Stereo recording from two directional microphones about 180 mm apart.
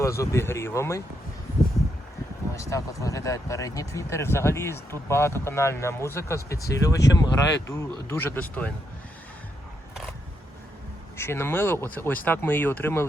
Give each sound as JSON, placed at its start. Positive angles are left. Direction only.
{"t": 0.0, "sound": "speech", "side_deg": 15}
{"t": 2.6, "sound": "speech", "side_deg": 15}
{"t": 11.2, "sound": "speech", "side_deg": 15}